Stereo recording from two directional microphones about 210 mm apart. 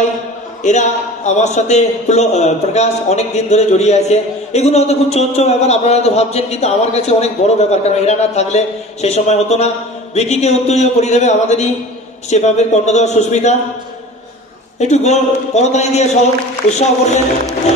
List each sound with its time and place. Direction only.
0.7 s a man's voice: 35° left (ahead or behind)
14.8 s a man's voice: 30° left (ahead or behind)